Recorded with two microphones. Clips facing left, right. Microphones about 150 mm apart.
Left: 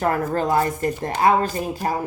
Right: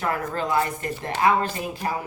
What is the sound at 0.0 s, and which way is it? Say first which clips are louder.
Speech: left 5 dB; 45° left (ahead or behind).